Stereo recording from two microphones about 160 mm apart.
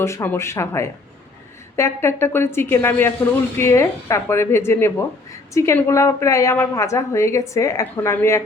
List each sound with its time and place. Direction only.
0.0 s a woman's voice: 15° left (ahead or behind)